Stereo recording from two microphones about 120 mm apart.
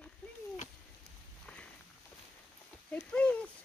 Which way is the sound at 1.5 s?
10° left (ahead or behind).